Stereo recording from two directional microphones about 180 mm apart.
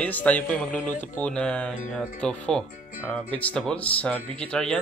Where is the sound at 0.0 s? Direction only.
10° left (ahead or behind).